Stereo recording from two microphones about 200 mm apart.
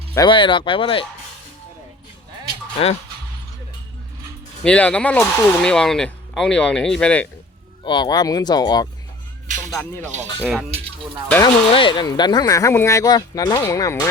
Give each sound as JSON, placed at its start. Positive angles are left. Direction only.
{"t": 0.1, "sound": "speech", "side_deg": 20}
{"t": 2.7, "sound": "speech", "side_deg": 30}
{"t": 4.6, "sound": "speech", "side_deg": 5}
{"t": 7.9, "sound": "speech", "side_deg": 20}
{"t": 10.4, "sound": "speech", "side_deg": 0}
{"t": 11.7, "sound": "speech", "side_deg": 25}